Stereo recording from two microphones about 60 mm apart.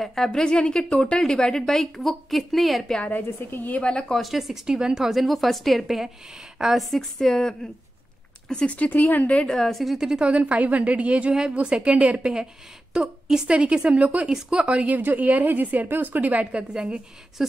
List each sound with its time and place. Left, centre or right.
0.0 s a woman's voice: centre
3.1 s a woman's voice: left
3.8 s a woman's voice: centre
4.2 s a woman's voice: centre
9.6 s a woman's voice: centre
9.9 s a woman's voice: centre